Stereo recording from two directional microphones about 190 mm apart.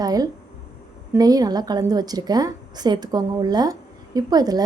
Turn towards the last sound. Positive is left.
turn(degrees=-20)  # may be behind; listen again after turning